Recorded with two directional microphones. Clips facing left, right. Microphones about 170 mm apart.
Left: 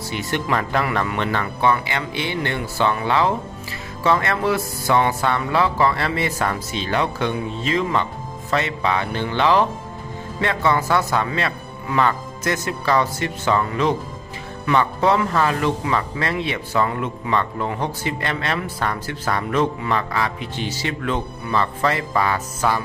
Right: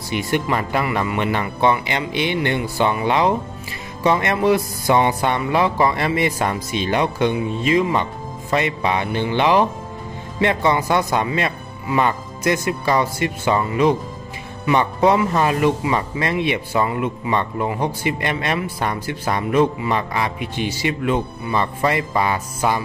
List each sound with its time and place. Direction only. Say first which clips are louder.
0.1 s speech: right 3 dB; 10° right (ahead or behind)